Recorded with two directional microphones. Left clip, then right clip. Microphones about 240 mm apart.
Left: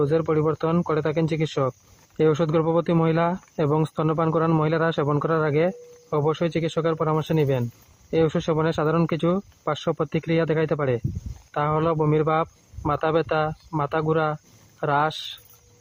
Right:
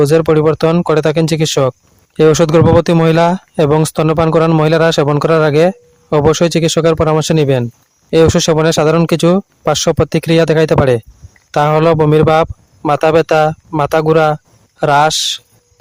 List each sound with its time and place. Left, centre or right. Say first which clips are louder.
0.0 s speech: right 12 dB; right